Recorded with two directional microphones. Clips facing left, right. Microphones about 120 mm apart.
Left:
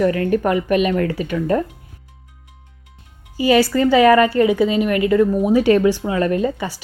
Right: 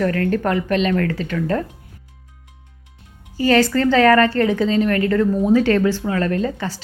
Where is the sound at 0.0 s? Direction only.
15° left (ahead or behind).